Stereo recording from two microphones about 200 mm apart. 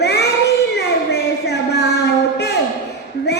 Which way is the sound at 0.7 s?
55° left (ahead or behind).